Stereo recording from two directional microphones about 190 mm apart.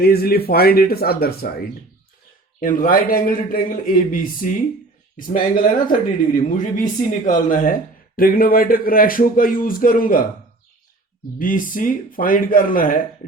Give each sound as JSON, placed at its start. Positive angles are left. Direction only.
{"t": 0.0, "sound": "speech", "side_deg": 55}
{"t": 2.6, "sound": "speech", "side_deg": 45}
{"t": 11.3, "sound": "speech", "side_deg": 45}